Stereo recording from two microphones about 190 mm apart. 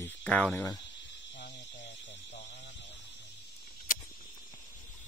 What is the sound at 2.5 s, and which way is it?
Alarm, 70° left (ahead or behind).